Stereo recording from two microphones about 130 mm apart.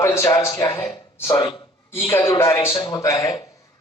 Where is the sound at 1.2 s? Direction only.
25° left (ahead or behind).